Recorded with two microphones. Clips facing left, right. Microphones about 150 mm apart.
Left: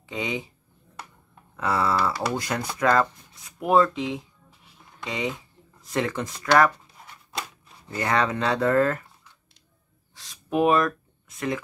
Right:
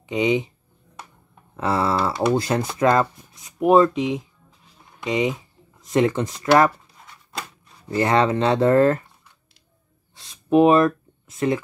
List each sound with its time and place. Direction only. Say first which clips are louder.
0.1 s speech: right 10 dB; 20° right (ahead or behind)
1.6 s speech: right 2 dB; 30° right (ahead or behind)
7.0 s a sound: right 1 dB; centre (ahead or behind)
7.9 s speech: right 6 dB; 25° right (ahead or behind)
10.1 s speech: right 8 dB; 25° right (ahead or behind)